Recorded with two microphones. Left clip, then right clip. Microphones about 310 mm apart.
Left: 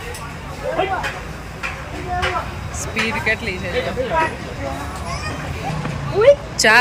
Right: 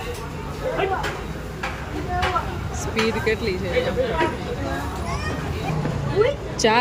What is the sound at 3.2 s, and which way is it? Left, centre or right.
Speech, centre.